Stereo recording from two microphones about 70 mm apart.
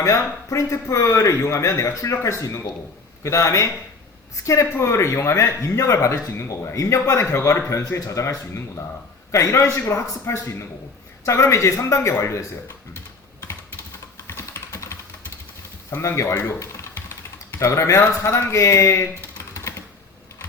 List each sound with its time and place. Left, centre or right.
0.0 s speech: left
14.3 s typing: left
15.9 s speech: left